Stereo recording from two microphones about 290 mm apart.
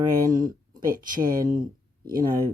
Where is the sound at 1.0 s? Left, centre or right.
Right.